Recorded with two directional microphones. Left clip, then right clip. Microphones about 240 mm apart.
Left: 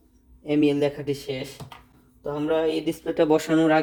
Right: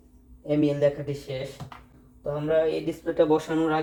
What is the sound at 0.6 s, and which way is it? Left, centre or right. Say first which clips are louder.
Speech: left 1 dB; left.